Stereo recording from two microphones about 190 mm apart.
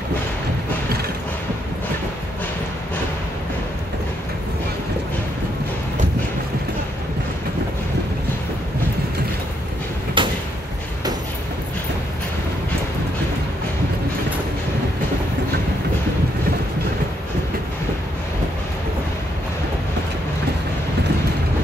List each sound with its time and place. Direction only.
10.2 s door: 25° right (ahead or behind)